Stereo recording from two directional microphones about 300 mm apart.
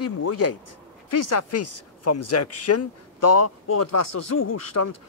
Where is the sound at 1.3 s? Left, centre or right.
Left.